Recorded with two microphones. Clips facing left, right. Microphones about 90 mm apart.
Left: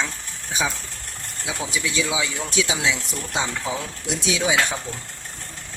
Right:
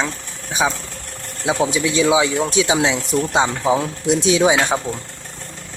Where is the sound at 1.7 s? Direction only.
35° right (ahead or behind).